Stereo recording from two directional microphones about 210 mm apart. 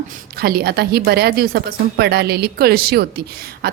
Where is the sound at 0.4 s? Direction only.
50° right (ahead or behind).